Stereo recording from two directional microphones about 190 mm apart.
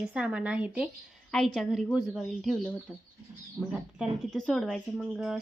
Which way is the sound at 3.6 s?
15° right (ahead or behind).